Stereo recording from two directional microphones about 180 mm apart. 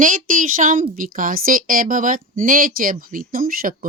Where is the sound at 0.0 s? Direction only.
45° right (ahead or behind).